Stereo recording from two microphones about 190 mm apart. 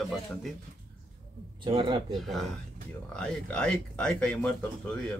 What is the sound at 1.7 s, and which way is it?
Speech, 25° right (ahead or behind).